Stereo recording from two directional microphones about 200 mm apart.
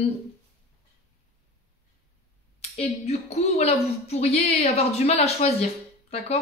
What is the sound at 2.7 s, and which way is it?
Speech, 35° left (ahead or behind).